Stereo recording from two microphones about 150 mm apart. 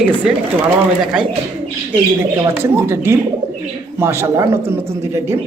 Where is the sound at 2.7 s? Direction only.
15° right (ahead or behind).